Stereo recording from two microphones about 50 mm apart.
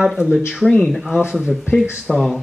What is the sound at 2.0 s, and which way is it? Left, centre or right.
Speech, centre.